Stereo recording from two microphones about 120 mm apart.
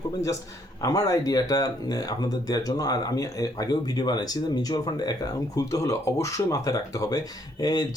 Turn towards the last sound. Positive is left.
turn(degrees=35)  # may be behind; listen again after turning